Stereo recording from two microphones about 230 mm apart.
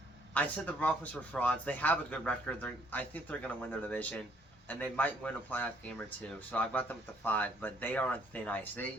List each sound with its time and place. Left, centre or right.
0.3 s a man's voice: centre